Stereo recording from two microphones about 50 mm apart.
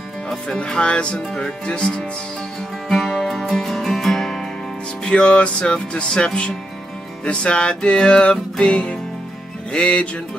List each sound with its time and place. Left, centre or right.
0.6 s music: centre
2.9 s music: centre
5.0 s music: left